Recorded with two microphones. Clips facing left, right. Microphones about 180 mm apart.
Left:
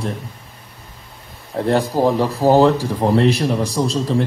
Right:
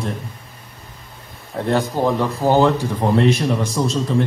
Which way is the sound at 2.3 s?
Centre (ahead or behind).